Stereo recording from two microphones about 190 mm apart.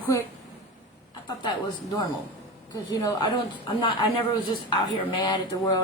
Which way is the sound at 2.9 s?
20° left (ahead or behind).